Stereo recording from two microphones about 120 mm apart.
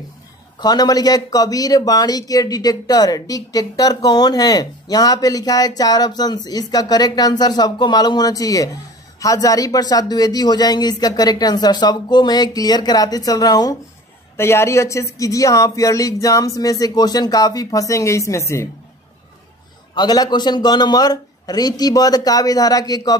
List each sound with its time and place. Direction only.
0.6 s a man's voice: 35° left (ahead or behind)
14.3 s speech: 20° left (ahead or behind)
19.9 s a man's voice: 35° left (ahead or behind)